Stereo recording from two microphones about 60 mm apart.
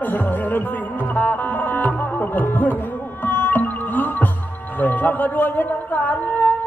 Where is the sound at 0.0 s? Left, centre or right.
Left.